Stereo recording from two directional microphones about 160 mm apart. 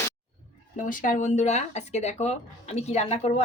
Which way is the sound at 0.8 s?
55° left (ahead or behind).